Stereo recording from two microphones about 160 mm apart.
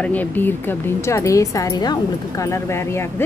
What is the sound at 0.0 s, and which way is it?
A woman's voice, 10° left (ahead or behind).